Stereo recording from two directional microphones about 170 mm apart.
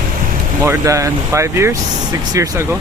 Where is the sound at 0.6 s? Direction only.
20° right (ahead or behind).